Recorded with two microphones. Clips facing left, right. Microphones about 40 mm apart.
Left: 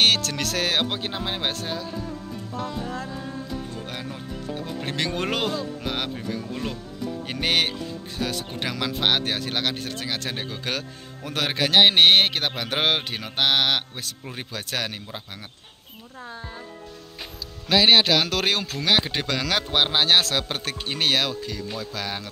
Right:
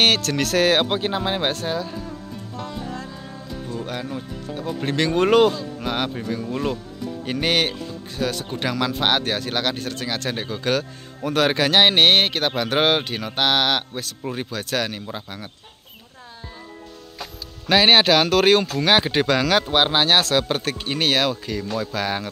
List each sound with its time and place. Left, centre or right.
0.0 s speech: centre
1.5 s speech: centre
3.7 s speech: centre
7.2 s speech: centre
17.6 s speech: centre
21.3 s speech: right